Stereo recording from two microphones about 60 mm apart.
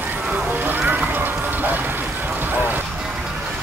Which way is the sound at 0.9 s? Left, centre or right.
Right.